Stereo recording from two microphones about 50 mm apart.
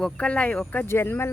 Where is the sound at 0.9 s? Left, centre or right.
Left.